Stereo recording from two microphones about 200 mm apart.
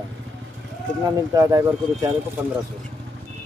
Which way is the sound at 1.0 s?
15° right (ahead or behind).